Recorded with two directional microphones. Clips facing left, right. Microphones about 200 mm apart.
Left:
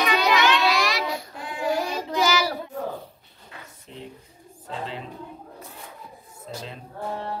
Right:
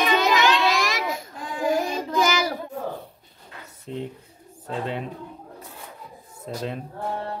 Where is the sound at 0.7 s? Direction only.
45° right (ahead or behind).